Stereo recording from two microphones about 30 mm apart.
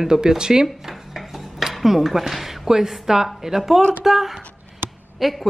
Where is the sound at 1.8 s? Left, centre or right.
Centre.